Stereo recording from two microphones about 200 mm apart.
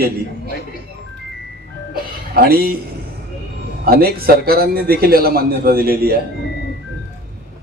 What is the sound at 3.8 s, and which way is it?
A man's voice, 50° right (ahead or behind).